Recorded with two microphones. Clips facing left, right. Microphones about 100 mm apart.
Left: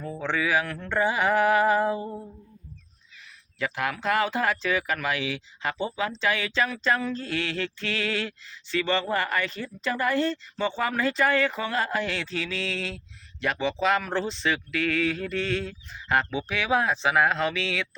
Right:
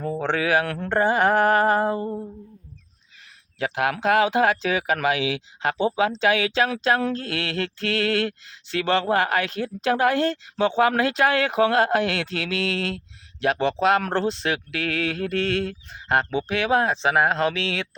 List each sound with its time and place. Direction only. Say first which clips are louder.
0.0 s speech: right 4 dB; 65° right (ahead or behind)
0.9 s a sound: right 4 dB; 50° right (ahead or behind)
3.6 s speech: right 5 dB; 80° right